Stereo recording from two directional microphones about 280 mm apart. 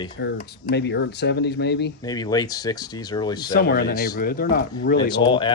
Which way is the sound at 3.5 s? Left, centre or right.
Left.